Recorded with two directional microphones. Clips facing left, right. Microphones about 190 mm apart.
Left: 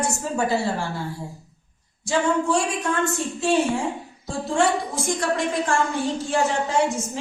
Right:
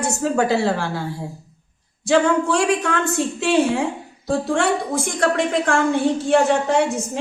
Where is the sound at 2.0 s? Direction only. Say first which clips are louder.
Right 5 dB; 85° right.